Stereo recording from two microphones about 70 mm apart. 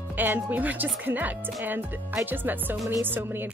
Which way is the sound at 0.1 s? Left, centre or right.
Right.